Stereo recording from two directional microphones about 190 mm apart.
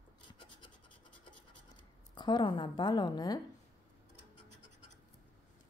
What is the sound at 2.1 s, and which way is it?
Speech, 25° left (ahead or behind).